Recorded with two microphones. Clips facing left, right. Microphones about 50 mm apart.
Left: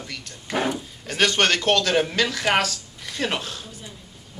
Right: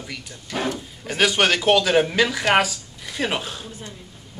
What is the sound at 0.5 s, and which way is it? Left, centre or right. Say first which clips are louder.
Speech: left 1 dB; centre.